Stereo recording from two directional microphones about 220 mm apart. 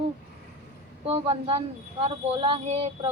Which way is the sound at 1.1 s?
25° right (ahead or behind).